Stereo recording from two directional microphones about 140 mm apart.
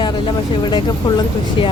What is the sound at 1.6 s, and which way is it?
Speech, 35° left (ahead or behind).